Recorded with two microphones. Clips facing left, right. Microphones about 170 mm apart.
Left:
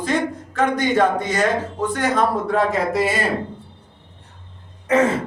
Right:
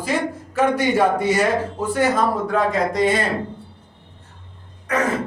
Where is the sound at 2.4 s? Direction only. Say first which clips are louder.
Even; centre (ahead or behind).